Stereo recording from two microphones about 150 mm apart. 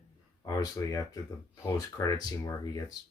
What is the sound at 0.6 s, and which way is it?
Speech, 25° left (ahead or behind).